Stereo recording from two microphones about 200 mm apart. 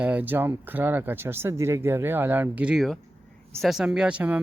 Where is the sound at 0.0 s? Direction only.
10° right (ahead or behind).